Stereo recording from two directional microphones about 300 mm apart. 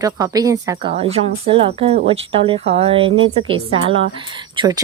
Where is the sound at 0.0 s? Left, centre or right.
Centre.